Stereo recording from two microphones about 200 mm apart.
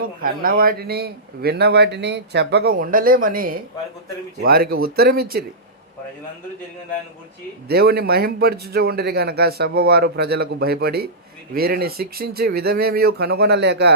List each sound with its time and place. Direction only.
0.0 s speech: 45° right (ahead or behind)
7.7 s speech: 50° right (ahead or behind)